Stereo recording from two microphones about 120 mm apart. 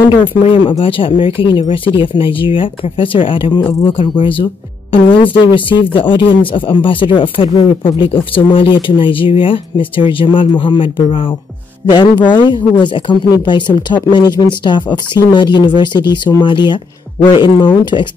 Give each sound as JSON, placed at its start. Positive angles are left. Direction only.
{"t": 0.8, "sound": "speech", "side_deg": 45}